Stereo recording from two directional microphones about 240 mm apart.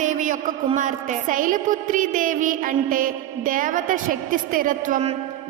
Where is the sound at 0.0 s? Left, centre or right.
Right.